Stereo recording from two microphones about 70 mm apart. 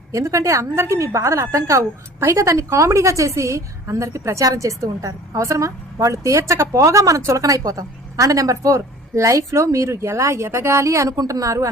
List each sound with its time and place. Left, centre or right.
0.1 s a woman's voice: right